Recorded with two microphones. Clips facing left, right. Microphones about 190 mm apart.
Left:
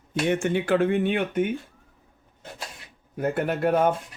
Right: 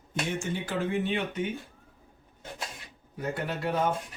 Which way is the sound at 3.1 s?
55° left (ahead or behind).